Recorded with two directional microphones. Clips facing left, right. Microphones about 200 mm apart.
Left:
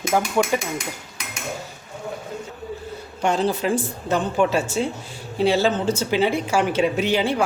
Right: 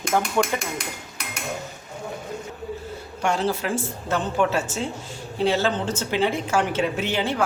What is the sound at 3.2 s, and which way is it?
Speech, 20° left (ahead or behind).